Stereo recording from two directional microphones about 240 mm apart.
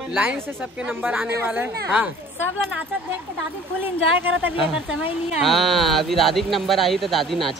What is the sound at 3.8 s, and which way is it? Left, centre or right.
A woman's voice, centre.